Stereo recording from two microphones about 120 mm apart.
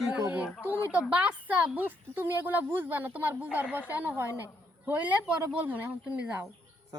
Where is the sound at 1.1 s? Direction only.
10° right (ahead or behind).